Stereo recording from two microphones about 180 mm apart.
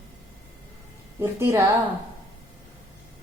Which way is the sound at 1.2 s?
15° right (ahead or behind).